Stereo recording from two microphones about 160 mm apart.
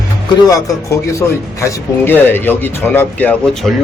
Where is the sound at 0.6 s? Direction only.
20° left (ahead or behind).